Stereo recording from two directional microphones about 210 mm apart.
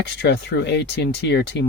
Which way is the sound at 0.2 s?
55° left (ahead or behind).